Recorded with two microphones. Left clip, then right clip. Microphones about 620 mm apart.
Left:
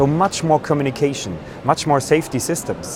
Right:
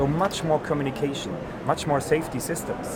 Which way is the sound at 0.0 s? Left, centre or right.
Left.